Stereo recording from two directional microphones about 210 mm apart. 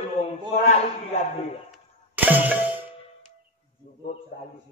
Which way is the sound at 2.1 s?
10° right (ahead or behind).